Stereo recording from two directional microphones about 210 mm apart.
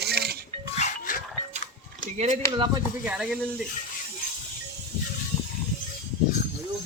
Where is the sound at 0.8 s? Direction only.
35° left (ahead or behind).